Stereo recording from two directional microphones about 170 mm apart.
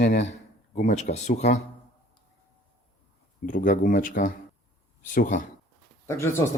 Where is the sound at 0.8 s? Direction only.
50° left (ahead or behind).